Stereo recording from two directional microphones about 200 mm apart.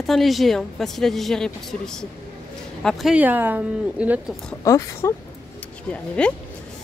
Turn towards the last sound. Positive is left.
turn(degrees=5)  # may be behind; listen again after turning